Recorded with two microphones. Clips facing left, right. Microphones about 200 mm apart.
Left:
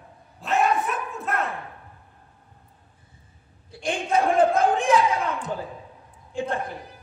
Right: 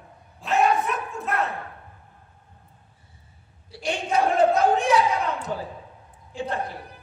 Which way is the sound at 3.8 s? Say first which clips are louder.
Left 1 dB; 50° left (ahead or behind).